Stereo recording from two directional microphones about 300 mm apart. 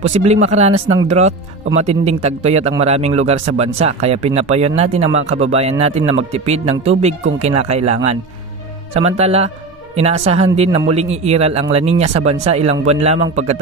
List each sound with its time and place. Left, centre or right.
0.0 s speech: right